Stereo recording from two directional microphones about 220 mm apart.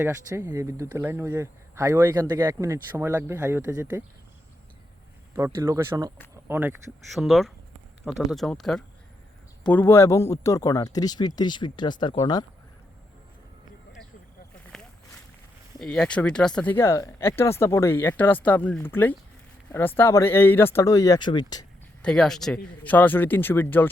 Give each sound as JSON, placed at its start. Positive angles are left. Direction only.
{"t": 0.0, "sound": "speech", "side_deg": -15}
{"t": 5.4, "sound": "speech", "side_deg": -15}
{"t": 15.8, "sound": "speech", "side_deg": 5}
{"t": 22.0, "sound": "speech", "side_deg": 0}